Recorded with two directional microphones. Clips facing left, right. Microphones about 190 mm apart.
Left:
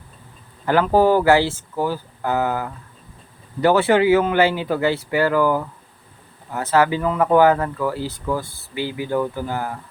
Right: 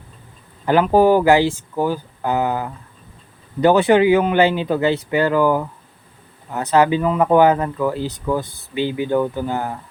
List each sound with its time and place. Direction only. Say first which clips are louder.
0.6 s speech: right 2 dB; 20° right (ahead or behind)